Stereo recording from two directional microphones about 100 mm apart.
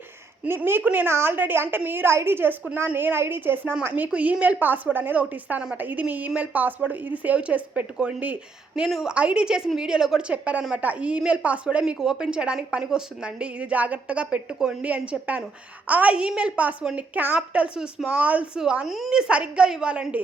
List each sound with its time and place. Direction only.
0.4 s a woman's voice: 20° right (ahead or behind); by 19.2 s centre (ahead or behind)
19.3 s a woman's voice: 10° right (ahead or behind)